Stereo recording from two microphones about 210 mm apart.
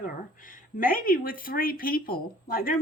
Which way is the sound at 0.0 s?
40° left (ahead or behind).